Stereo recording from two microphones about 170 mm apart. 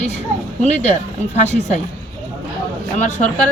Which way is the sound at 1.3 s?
40° left (ahead or behind).